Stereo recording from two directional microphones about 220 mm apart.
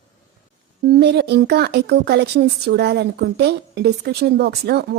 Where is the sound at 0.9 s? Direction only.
50° right (ahead or behind).